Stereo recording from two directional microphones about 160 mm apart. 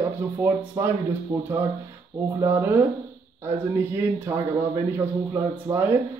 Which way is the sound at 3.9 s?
15° right (ahead or behind).